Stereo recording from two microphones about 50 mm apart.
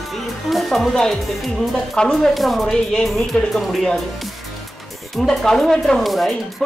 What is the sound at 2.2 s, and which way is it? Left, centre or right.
Speech, centre.